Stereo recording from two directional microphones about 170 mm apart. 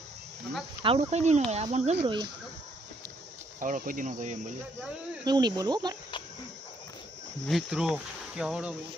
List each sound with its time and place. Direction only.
0.8 s speech: 35° right (ahead or behind)
3.6 s cricket: 50° right (ahead or behind)
5.2 s speech: 25° right (ahead or behind)
7.4 s speech: centre (ahead or behind)